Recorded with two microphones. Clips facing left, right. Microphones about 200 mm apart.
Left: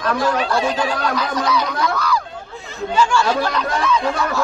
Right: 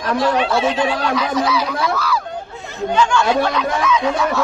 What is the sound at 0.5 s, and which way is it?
Speech, centre (ahead or behind).